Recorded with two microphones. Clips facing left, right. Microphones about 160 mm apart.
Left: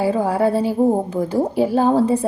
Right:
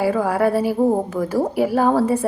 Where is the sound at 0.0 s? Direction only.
25° left (ahead or behind).